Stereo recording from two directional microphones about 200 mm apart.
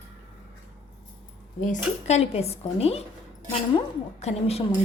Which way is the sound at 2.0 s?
30° left (ahead or behind).